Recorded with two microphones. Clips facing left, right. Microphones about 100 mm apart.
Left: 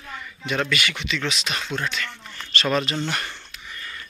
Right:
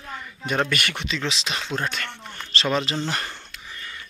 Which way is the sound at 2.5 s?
25° right (ahead or behind).